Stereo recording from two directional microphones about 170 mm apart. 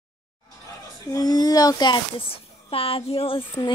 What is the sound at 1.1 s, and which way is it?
A child's voice, 25° left (ahead or behind).